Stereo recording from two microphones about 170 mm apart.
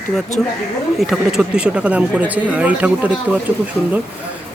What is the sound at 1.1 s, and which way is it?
Speech, 5° right (ahead or behind).